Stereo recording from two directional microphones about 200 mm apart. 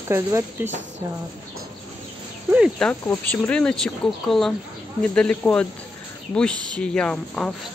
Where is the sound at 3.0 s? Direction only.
10° left (ahead or behind).